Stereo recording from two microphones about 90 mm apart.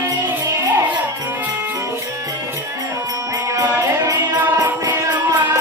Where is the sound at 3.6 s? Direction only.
35° right (ahead or behind).